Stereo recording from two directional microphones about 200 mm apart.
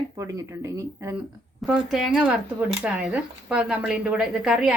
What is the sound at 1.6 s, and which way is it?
Speech, centre (ahead or behind).